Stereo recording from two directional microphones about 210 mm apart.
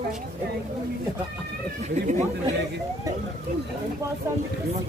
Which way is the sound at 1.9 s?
35° right (ahead or behind).